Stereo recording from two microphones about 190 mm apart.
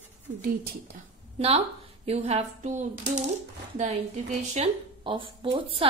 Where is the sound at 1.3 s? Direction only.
30° right (ahead or behind).